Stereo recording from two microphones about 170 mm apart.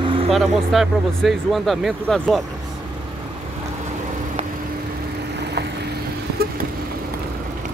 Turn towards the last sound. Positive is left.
turn(degrees=-75)  # may be behind; listen again after turning